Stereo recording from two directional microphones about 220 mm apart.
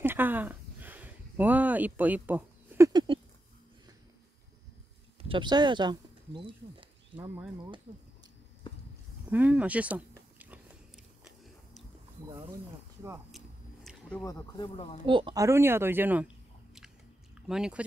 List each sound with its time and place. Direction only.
0.0 s a sound: 10° right (ahead or behind)
2.9 s a sound: 20° right (ahead or behind)
5.3 s speech: 20° right (ahead or behind)
7.2 s speech: 5° right (ahead or behind)
9.3 s speech: 5° right (ahead or behind)
13.8 s a sound: 5° left (ahead or behind)
14.2 s speech: 20° left (ahead or behind)
15.0 s speech: 20° right (ahead or behind)
17.5 s speech: 5° right (ahead or behind)